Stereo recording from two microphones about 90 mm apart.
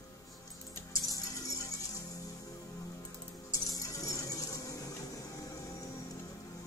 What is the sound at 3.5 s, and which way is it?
Music, 40° left (ahead or behind).